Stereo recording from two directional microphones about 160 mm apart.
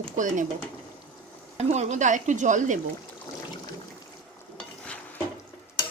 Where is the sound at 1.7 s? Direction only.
45° right (ahead or behind).